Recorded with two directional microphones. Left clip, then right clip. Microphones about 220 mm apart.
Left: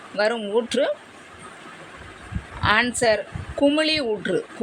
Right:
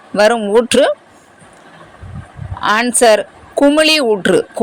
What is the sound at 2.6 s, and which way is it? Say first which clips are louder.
Speech: right 8 dB; 25° right (ahead or behind).